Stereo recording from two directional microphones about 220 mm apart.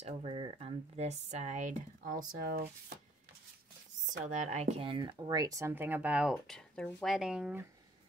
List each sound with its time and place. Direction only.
0.0 s speech: 25° right (ahead or behind)
4.2 s speech: 35° right (ahead or behind); by 7.6 s 5° right (ahead or behind)